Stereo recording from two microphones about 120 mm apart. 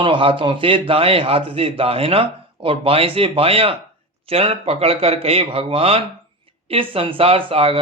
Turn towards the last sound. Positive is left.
turn(degrees=-50)  # may be behind; listen again after turning